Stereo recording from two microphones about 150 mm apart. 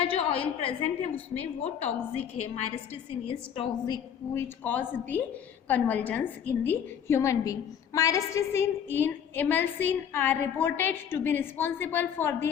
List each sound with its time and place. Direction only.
0.0 s a woman's voice: 40° left (ahead or behind)
4.4 s a woman's voice: 10° left (ahead or behind)